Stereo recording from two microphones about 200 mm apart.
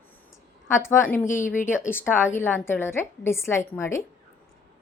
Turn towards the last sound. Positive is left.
turn(degrees=15)  # may be behind; listen again after turning